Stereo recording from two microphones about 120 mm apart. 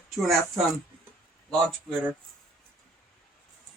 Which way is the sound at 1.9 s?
5° left (ahead or behind).